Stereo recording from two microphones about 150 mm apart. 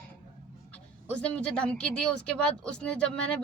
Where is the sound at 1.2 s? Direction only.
5° left (ahead or behind).